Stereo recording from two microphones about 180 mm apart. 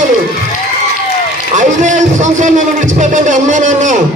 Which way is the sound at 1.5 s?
45° right (ahead or behind).